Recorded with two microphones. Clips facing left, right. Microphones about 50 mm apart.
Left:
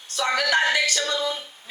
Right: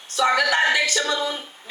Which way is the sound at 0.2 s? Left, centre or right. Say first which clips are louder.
Right 3 dB; right.